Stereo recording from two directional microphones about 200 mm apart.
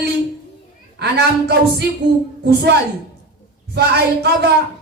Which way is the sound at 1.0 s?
55° right (ahead or behind).